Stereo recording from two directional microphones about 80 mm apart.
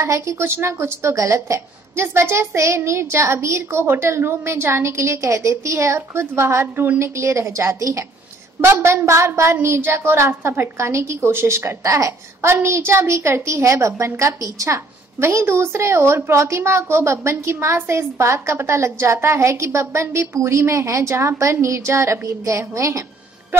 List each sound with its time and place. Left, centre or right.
0.0 s a woman's voice: right